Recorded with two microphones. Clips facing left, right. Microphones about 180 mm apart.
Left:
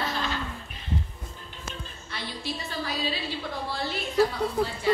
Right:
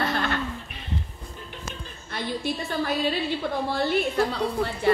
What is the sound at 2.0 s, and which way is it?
A woman's voice, 50° right (ahead or behind).